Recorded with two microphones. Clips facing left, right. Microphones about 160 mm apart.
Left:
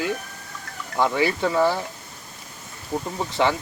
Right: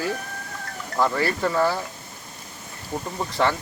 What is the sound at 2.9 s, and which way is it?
Speech, centre (ahead or behind).